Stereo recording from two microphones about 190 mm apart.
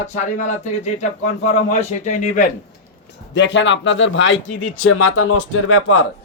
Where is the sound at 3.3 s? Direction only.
70° left (ahead or behind).